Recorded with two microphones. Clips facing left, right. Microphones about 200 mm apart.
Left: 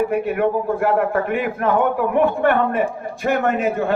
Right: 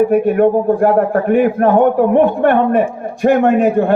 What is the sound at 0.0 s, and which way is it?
A man's voice, 45° right (ahead or behind).